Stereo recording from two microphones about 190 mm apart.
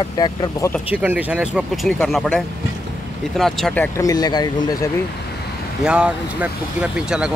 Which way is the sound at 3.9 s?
20° left (ahead or behind).